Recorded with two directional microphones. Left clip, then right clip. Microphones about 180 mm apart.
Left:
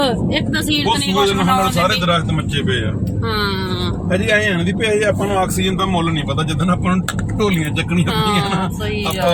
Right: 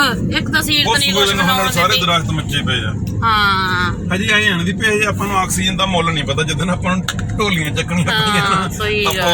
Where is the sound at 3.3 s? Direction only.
5° left (ahead or behind).